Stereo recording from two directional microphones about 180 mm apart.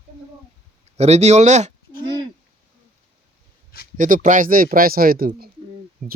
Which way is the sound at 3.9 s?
45° right (ahead or behind).